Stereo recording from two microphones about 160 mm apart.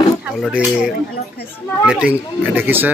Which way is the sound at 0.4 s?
5° right (ahead or behind).